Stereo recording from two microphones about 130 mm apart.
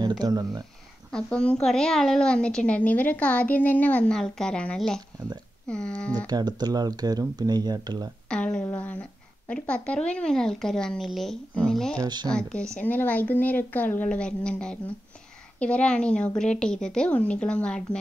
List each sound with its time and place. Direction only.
0.0 s speech: 30° right (ahead or behind)
1.1 s a woman's voice: 5° left (ahead or behind)
6.2 s speech: 30° right (ahead or behind)
8.3 s a woman's voice: 5° left (ahead or behind)
12.0 s speech: 35° right (ahead or behind)
12.3 s a woman's voice: 5° left (ahead or behind)